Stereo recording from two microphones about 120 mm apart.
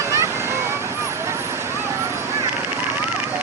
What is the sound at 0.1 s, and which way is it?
Vehicle, 25° right (ahead or behind).